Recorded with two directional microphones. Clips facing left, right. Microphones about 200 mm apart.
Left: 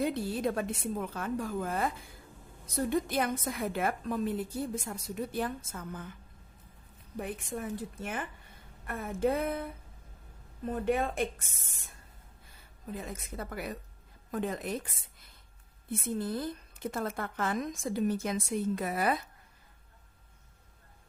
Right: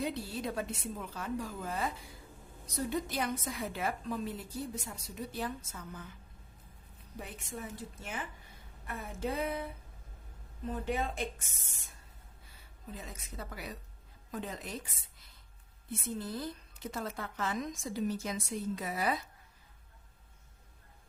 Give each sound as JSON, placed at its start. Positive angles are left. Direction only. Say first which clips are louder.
{"t": 0.0, "sound": "a woman's voice", "louder": "left 6 dB", "side_deg": 50}
{"t": 7.2, "sound": "a woman's voice", "louder": "left 7 dB", "side_deg": 55}
{"t": 10.7, "sound": "a woman's voice", "louder": "left 5 dB", "side_deg": 55}
{"t": 12.9, "sound": "a woman's voice", "louder": "left 6 dB", "side_deg": 55}
{"t": 15.9, "sound": "a woman's voice", "louder": "left 5 dB", "side_deg": 50}